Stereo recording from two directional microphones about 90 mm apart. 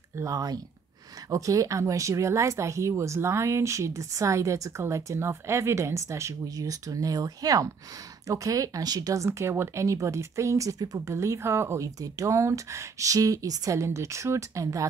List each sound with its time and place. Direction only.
0.2 s speech: 40° right (ahead or behind)